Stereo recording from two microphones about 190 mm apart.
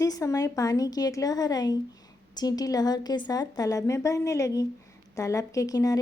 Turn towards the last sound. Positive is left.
turn(degrees=20)  # may be behind; listen again after turning